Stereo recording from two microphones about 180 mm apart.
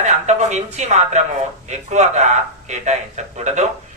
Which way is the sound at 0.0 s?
40° right (ahead or behind).